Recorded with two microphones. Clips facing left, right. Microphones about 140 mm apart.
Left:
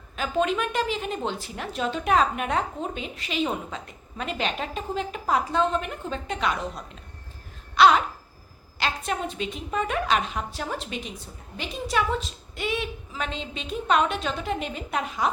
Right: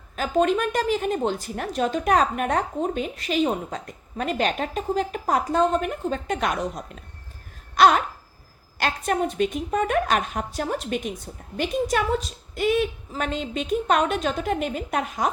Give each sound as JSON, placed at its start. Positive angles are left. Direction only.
{"t": 0.2, "sound": "a woman's voice", "side_deg": -45}